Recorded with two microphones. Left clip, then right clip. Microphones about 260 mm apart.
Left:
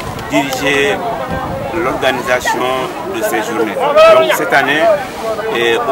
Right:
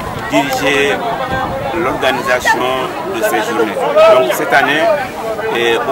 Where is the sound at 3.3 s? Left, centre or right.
Centre.